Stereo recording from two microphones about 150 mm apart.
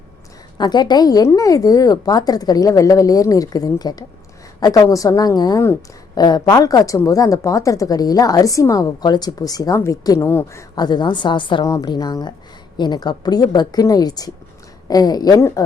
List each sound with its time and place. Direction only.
0.6 s a woman's voice: 30° left (ahead or behind)
10.8 s a woman's voice: 30° left (ahead or behind)